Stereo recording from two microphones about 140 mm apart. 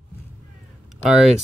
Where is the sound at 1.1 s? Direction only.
5° right (ahead or behind).